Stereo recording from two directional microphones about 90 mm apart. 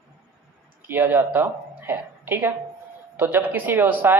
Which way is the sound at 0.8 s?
25° right (ahead or behind).